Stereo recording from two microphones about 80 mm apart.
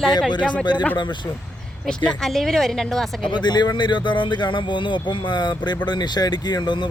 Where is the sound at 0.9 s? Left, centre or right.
Left.